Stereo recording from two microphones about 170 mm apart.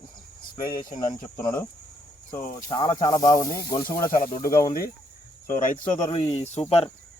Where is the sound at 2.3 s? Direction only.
50° left (ahead or behind).